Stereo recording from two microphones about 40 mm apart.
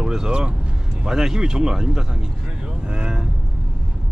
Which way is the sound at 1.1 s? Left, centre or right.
Centre.